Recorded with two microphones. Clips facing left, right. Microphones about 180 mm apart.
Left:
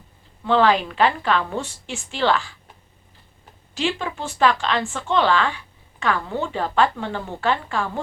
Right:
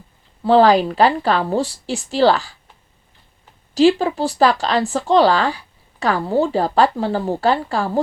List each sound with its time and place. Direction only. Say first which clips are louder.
0.4 s speech: right 6 dB; 35° right (ahead or behind)
3.8 s speech: right 11 dB; 35° right (ahead or behind)